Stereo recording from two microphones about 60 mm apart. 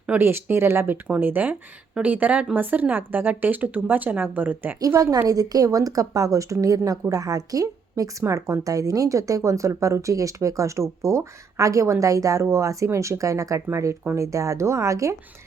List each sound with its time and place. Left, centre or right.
0.2 s speech: right
1.2 s a woman's voice: right
5.3 s speech: right
8.3 s speech: right
13.7 s speech: right